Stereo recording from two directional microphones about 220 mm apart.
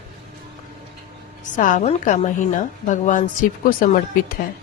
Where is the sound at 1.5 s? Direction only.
35° left (ahead or behind).